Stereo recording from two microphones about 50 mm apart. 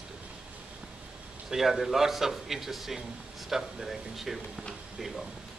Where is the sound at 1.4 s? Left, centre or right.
Centre.